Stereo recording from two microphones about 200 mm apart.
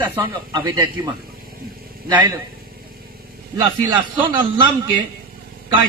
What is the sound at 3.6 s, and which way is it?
Speech, 25° right (ahead or behind).